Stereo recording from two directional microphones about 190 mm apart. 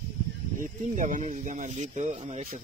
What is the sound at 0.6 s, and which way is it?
Speech, 45° right (ahead or behind).